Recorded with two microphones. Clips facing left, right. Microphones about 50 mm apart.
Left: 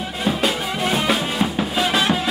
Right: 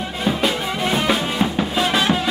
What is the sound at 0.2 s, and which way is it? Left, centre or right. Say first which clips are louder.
Music: right 1 dB; centre.